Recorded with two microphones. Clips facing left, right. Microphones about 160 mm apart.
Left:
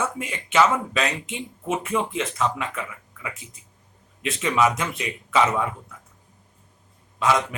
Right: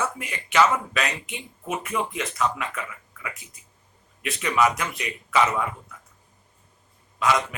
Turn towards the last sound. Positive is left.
turn(degrees=30)  # may be behind; listen again after turning